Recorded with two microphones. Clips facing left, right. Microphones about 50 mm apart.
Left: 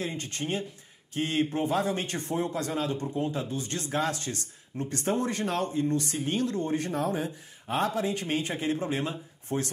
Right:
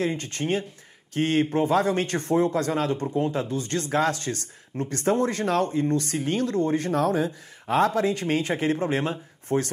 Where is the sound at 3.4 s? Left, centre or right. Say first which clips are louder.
Right 6 dB; right.